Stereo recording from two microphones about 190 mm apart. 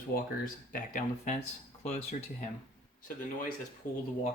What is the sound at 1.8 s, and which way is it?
Speech, 35° left (ahead or behind).